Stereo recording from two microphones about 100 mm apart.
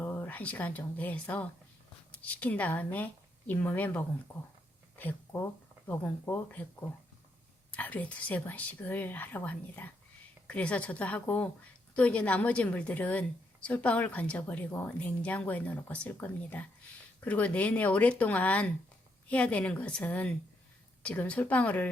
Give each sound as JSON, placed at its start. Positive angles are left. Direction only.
{"t": 0.0, "sound": "a woman's voice", "side_deg": 20}
{"t": 4.9, "sound": "a sound", "side_deg": 20}
{"t": 5.9, "sound": "a woman's voice", "side_deg": 20}
{"t": 7.7, "sound": "a woman's voice", "side_deg": 15}